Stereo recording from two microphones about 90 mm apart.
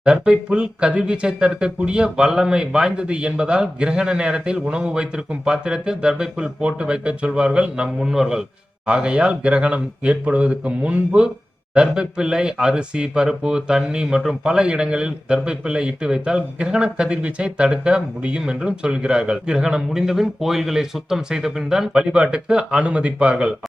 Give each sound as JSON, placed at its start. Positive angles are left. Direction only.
{"t": 0.0, "sound": "speech", "side_deg": -10}